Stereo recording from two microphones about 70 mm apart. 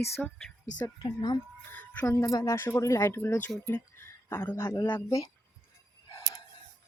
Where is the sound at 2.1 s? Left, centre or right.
Left.